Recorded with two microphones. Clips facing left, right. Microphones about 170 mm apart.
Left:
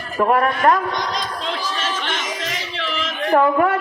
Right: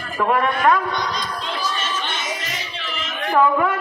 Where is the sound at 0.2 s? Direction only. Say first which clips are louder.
Left 2 dB; 40° left (ahead or behind).